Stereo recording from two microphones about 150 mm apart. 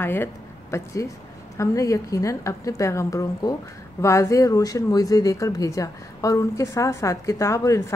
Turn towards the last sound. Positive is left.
turn(degrees=20)  # may be behind; listen again after turning